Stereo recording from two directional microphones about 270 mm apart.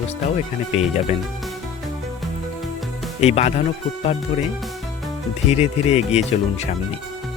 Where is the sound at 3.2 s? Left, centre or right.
Left.